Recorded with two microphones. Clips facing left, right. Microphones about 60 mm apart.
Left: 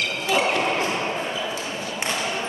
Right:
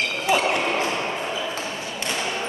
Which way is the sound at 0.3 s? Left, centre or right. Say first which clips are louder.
Right 1 dB; right.